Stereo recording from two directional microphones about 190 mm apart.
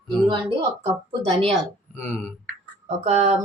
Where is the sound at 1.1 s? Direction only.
25° right (ahead or behind).